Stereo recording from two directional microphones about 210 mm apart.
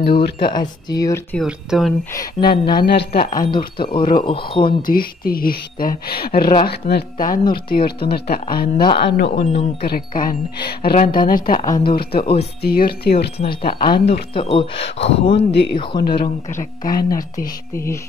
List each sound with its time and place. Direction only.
0.0 s speech: 45° left (ahead or behind)
0.4 s speech: 20° left (ahead or behind)
1.4 s speech: centre (ahead or behind)
2.1 s speech: 20° left (ahead or behind)
2.7 s speech: 45° left (ahead or behind)
3.5 s speech: 20° left (ahead or behind)
4.6 s speech: 45° left (ahead or behind)
11.6 s speech: 20° left (ahead or behind)
11.9 s speech: 45° left (ahead or behind)
13.7 s speech: 25° left (ahead or behind)
15.3 s speech: 55° left (ahead or behind)